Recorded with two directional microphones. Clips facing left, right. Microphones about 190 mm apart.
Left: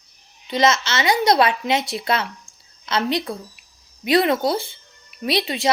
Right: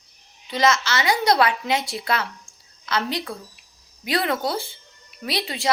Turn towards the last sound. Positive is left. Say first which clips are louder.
# left 6 dB
turn(degrees=20)  # may be behind; listen again after turning